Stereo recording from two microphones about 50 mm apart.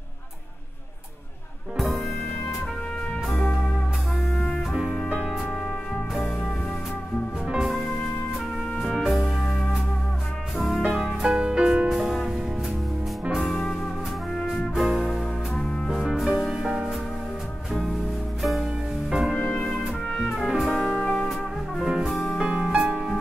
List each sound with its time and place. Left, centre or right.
4.3 s music: left
5.1 s music: centre
6.1 s music: centre
7.4 s music: centre
8.7 s music: centre
10.9 s music: centre
11.3 s music: centre
11.9 s music: centre
13.4 s music: centre
14.3 s brass instrument: centre
14.8 s music: centre
18.6 s music: centre
20.1 s music: centre
20.4 s music: centre